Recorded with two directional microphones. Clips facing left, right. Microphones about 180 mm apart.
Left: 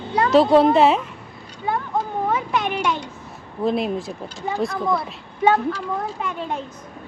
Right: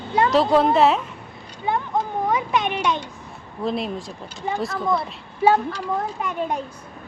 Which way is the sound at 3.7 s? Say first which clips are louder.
Left 4 dB; centre (ahead or behind).